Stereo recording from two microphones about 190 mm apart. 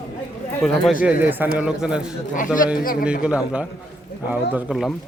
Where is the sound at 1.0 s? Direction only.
10° right (ahead or behind).